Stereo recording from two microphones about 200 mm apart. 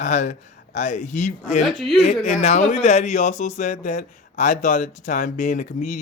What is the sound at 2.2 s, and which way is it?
Speech, 35° left (ahead or behind).